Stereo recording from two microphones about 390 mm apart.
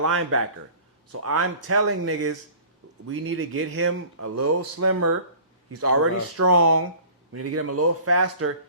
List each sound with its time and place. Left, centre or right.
0.0 s speech: right